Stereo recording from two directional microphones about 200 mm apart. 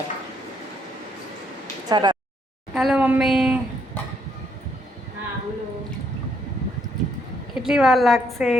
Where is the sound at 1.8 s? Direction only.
20° right (ahead or behind).